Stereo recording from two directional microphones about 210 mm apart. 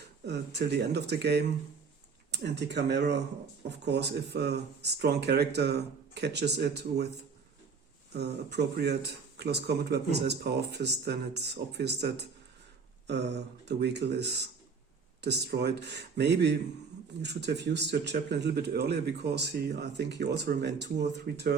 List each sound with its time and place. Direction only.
0.3 s speech: 55° right (ahead or behind)